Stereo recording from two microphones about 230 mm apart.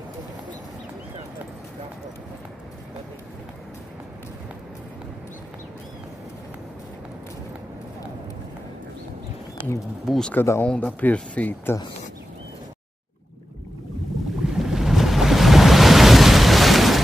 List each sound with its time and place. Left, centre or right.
10.0 s speech: centre
14.6 s waves: centre